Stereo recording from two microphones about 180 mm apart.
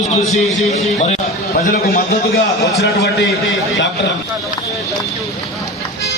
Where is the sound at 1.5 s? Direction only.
55° left (ahead or behind).